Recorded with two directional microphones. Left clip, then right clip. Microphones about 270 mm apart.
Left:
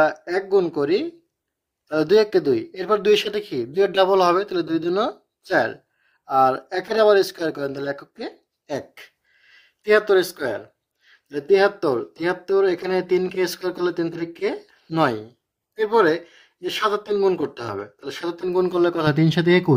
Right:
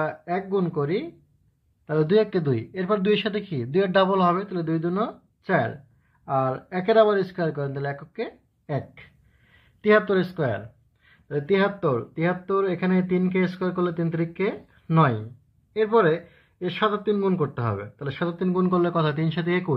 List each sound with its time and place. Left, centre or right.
0.0 s speech: left